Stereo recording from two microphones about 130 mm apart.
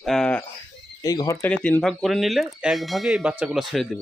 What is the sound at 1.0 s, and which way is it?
Speech, 25° left (ahead or behind).